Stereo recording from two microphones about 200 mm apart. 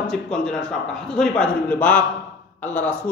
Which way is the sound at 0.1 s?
5° left (ahead or behind).